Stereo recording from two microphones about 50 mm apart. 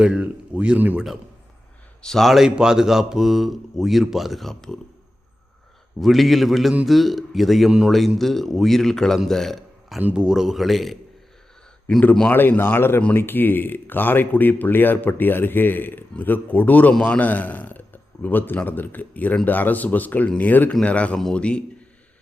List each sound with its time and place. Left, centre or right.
0.0 s speech: centre
0.9 s a man's voice: centre
2.0 s a man's voice: centre
2.3 s speech: centre
6.0 s speech: centre
10.2 s speech: centre
11.9 s speech: left
12.3 s speech: left
17.2 s speech: left
20.8 s speech: left